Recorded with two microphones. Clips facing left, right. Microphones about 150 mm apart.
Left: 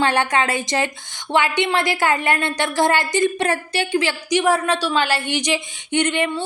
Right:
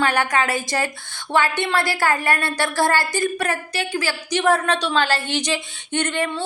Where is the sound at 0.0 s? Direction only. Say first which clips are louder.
Left 1 dB; 25° left (ahead or behind).